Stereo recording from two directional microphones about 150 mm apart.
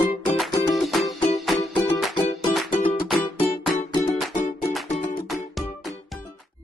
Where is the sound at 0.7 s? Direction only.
Centre (ahead or behind).